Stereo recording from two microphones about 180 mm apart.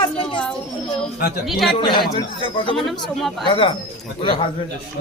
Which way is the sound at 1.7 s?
25° left (ahead or behind).